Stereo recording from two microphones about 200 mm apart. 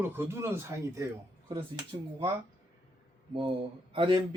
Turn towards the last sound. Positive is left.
turn(degrees=-25)  # may be behind; listen again after turning